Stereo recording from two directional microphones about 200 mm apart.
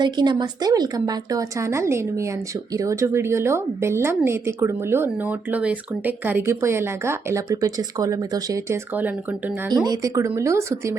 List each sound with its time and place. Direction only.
0.0 s a woman's voice: 20° right (ahead or behind)
9.6 s a woman's voice: 20° right (ahead or behind)